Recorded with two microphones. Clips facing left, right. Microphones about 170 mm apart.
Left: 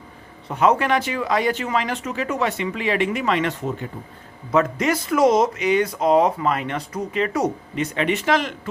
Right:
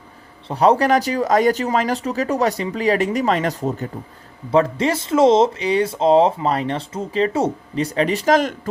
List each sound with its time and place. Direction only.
0.4 s speech: 30° right (ahead or behind)